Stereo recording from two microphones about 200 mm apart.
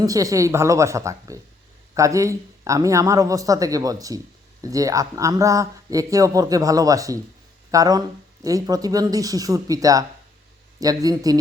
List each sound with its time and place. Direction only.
0.0 s a man's voice: 15° right (ahead or behind)